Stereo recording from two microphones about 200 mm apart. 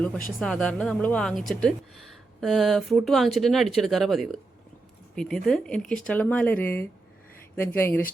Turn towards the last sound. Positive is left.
turn(degrees=10)  # may be behind; listen again after turning